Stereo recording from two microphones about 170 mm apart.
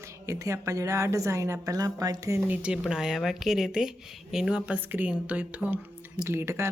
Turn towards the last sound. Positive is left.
turn(degrees=-15)  # may be behind; listen again after turning